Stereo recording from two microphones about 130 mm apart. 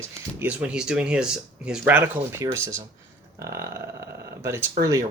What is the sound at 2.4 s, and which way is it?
Speech, 20° right (ahead or behind).